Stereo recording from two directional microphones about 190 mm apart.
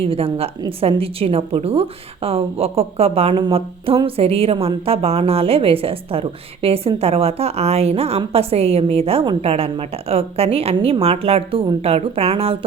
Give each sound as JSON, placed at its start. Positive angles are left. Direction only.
{"t": 0.0, "sound": "a woman's voice", "side_deg": -30}